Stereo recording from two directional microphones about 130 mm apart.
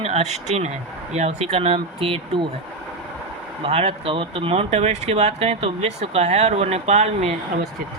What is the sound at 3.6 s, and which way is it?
Speech, 55° right (ahead or behind).